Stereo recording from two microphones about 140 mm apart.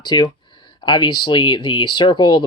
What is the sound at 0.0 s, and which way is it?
Speech, 30° left (ahead or behind).